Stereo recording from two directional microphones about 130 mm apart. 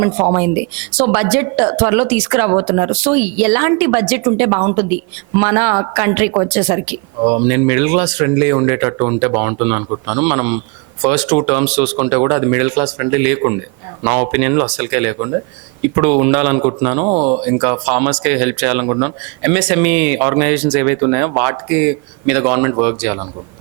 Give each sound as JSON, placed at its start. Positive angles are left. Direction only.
{"t": 0.0, "sound": "a woman's voice", "side_deg": -20}